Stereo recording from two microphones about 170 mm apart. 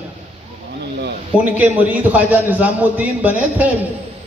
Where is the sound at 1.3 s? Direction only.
10° right (ahead or behind).